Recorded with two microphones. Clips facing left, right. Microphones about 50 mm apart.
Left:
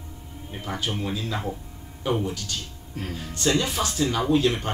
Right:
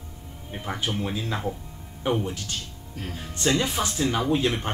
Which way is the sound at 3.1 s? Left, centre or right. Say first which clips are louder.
Left 1 dB; right.